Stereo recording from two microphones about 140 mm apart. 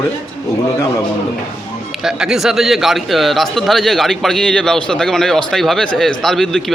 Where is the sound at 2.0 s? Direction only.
5° right (ahead or behind).